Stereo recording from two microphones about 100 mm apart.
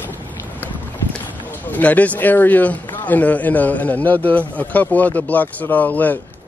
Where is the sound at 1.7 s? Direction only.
15° left (ahead or behind).